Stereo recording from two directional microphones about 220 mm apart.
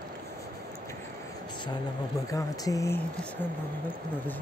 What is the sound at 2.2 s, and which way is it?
Speech, 15° left (ahead or behind).